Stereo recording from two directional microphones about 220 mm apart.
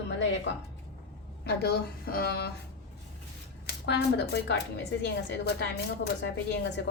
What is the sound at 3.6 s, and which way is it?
Speech, 50° left (ahead or behind).